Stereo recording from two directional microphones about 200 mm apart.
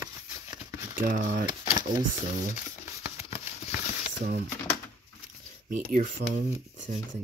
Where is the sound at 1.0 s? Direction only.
40° right (ahead or behind).